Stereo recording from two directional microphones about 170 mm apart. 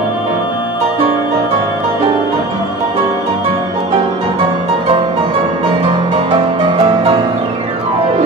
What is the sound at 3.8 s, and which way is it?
Music, 35° right (ahead or behind).